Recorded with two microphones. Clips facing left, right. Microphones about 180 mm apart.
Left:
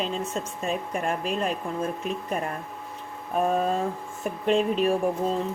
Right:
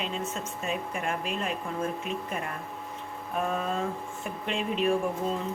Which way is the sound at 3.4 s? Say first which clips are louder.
Left 6 dB; 35° left (ahead or behind).